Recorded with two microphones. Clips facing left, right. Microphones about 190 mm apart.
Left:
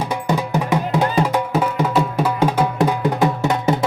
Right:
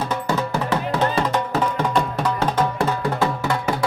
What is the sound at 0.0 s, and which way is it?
Music, 10° left (ahead or behind).